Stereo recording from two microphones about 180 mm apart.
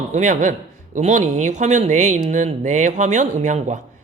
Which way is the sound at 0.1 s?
45° right (ahead or behind).